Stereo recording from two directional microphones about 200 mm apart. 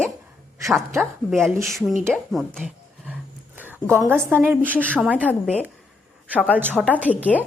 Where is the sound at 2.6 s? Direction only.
5° right (ahead or behind).